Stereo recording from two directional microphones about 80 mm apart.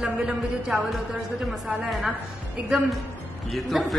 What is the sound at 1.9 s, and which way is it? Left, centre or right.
Speech, centre.